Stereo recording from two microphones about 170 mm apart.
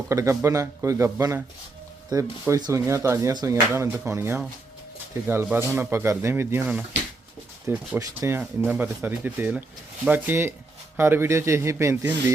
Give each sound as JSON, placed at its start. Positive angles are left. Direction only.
{"t": 0.1, "sound": "speech", "side_deg": -15}